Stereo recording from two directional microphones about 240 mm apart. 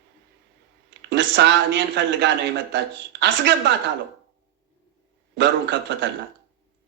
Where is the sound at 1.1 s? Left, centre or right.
Right.